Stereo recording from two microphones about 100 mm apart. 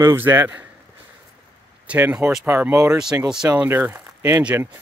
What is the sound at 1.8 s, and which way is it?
Speech, 15° right (ahead or behind).